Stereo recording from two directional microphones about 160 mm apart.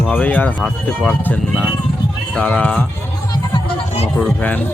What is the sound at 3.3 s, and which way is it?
Music, 30° left (ahead or behind).